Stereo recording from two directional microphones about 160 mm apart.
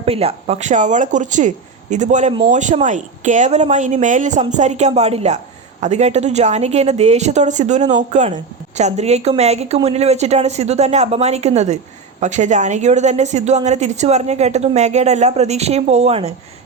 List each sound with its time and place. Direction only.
0.0 s a woman's voice: 40° right (ahead or behind)